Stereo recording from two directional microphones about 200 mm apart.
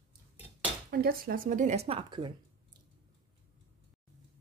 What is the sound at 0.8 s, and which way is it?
Speech, 50° right (ahead or behind).